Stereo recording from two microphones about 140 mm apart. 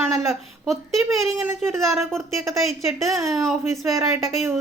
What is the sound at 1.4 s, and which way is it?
Speech, 15° right (ahead or behind).